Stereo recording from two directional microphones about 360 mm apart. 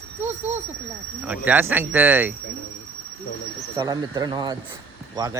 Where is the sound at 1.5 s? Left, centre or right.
Centre.